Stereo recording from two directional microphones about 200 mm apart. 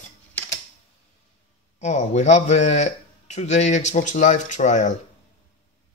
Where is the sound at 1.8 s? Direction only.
35° left (ahead or behind).